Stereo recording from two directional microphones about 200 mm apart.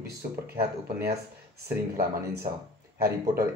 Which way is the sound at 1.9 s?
45° right (ahead or behind).